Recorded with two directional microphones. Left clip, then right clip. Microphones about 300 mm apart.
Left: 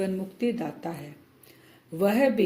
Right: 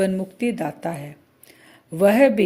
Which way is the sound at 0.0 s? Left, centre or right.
Right.